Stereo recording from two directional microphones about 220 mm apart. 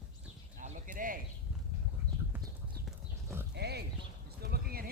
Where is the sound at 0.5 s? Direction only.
35° right (ahead or behind).